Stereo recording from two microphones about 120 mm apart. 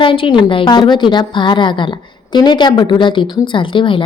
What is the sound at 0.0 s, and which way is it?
A woman's voice, 45° left (ahead or behind).